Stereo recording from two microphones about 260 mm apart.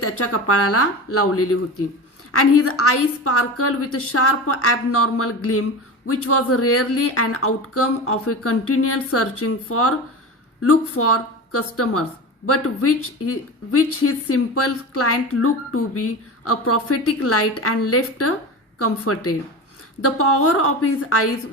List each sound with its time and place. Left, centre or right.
0.0 s speech: left